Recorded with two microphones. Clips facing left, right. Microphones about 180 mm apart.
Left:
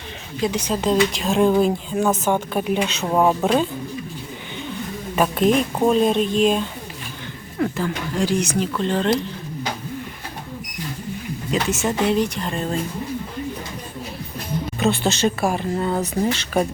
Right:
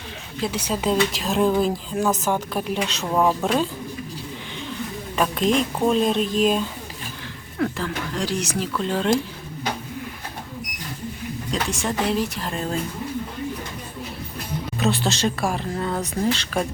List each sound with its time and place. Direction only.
0.4 s speech: 5° right (ahead or behind)
3.1 s speech: 15° left (ahead or behind)
5.1 s speech: 5° left (ahead or behind)
7.6 s speech: 5° left (ahead or behind)
11.5 s speech: 5° left (ahead or behind)
14.8 s speech: centre (ahead or behind)